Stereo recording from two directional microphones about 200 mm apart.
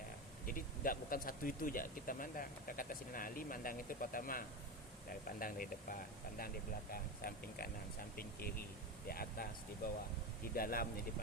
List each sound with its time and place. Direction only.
0.4 s speech: 45° left (ahead or behind)
10.5 s speech: 45° left (ahead or behind)